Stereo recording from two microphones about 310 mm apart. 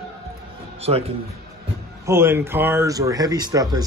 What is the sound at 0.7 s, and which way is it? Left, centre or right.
Speech, centre.